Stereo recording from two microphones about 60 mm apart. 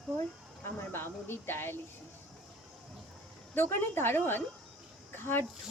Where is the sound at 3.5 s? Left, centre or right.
Left.